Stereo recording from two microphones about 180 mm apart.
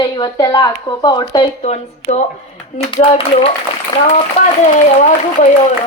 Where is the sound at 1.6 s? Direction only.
35° left (ahead or behind).